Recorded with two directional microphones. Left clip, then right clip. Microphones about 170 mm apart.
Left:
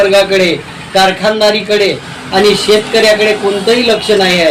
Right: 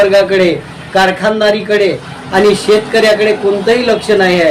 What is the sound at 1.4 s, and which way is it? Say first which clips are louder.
A man's voice: left 1 dB; 5° right (ahead or behind).